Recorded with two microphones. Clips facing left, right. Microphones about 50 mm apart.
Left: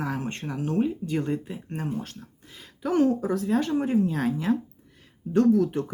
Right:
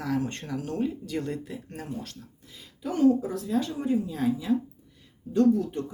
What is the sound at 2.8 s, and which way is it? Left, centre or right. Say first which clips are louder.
Speech: even; left.